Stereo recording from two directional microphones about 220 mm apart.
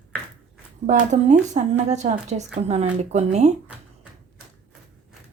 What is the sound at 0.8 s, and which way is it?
A woman's voice, 30° right (ahead or behind).